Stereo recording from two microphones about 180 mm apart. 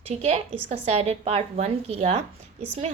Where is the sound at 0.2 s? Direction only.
35° right (ahead or behind).